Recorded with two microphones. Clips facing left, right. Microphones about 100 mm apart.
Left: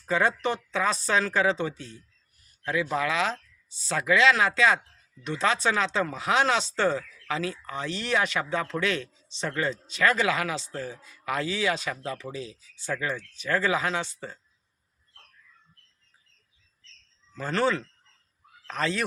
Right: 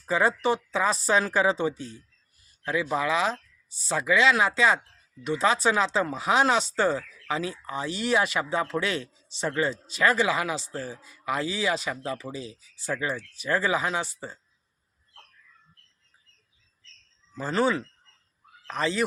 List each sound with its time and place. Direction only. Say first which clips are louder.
0.0 s speech: right 1 dB; 5° right (ahead or behind)
9.4 s a man's voice: right 3 dB; 25° right (ahead or behind)
9.6 s speech: left 1 dB; 5° right (ahead or behind)
17.3 s speech: right 1 dB; 5° right (ahead or behind)